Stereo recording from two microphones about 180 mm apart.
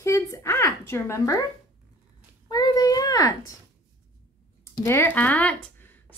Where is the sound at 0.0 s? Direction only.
15° left (ahead or behind).